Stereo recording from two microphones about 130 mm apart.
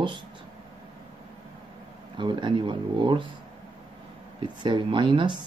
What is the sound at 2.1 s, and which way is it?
Speech, 40° right (ahead or behind).